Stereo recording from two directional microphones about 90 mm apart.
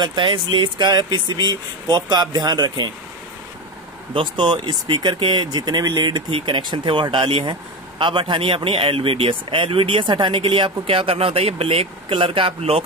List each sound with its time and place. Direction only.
0.0 s speech: 60° right (ahead or behind)
4.1 s speech: 65° right (ahead or behind)
6.3 s speech: 70° right (ahead or behind)
10.1 s speech: 60° right (ahead or behind); by 12.8 s 85° right